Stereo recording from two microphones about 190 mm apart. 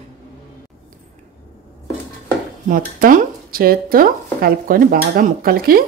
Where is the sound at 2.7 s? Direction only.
45° right (ahead or behind).